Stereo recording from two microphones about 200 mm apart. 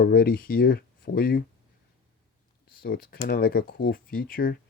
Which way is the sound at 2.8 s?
45° left (ahead or behind).